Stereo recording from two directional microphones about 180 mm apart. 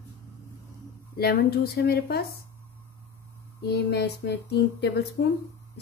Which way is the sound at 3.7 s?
65° left (ahead or behind).